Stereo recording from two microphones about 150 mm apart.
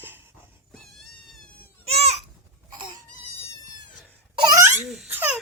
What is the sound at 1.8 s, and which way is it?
Babbling, 45° right (ahead or behind).